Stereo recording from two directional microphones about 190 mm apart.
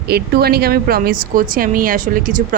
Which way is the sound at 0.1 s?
55° right (ahead or behind).